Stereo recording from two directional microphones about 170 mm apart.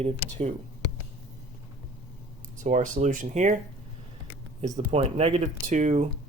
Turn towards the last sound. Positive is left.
turn(degrees=-45)  # may be behind; listen again after turning